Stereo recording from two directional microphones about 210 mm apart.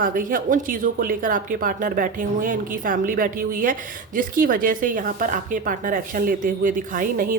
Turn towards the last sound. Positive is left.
turn(degrees=-40)  # may be behind; listen again after turning